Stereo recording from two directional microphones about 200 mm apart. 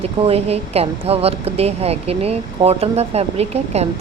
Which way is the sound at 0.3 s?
30° right (ahead or behind).